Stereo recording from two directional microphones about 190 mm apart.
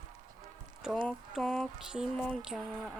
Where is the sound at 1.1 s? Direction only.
Centre (ahead or behind).